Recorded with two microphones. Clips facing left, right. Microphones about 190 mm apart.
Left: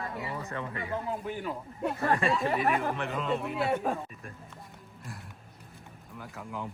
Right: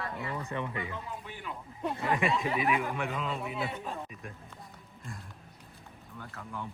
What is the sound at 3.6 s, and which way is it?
Speech, 60° left (ahead or behind).